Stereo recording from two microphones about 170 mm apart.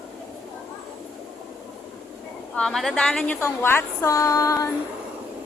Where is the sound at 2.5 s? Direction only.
5° left (ahead or behind); by 4.7 s 20° left (ahead or behind).